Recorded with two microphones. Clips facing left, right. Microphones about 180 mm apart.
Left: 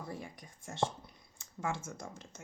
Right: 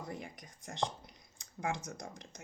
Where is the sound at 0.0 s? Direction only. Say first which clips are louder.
Even; 20° right (ahead or behind).